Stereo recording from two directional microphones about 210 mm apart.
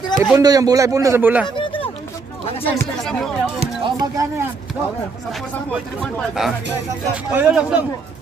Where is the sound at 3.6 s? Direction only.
20° right (ahead or behind).